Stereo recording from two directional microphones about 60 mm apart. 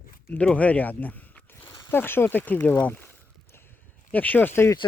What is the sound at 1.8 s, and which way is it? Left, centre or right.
Speech, left.